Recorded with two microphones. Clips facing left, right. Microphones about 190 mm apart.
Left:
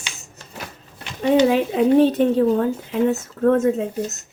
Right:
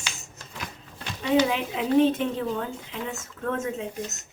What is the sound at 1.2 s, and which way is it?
Speech, 40° left (ahead or behind).